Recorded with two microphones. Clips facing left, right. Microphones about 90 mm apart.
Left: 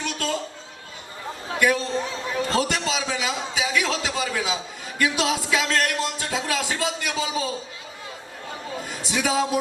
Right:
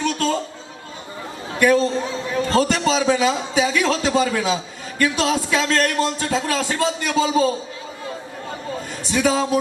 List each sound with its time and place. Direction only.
0.0 s chatter: 40° right (ahead or behind)
1.5 s a sound: 45° right (ahead or behind)
4.9 s music: 45° right (ahead or behind)
9.0 s a man's voice: 45° right (ahead or behind)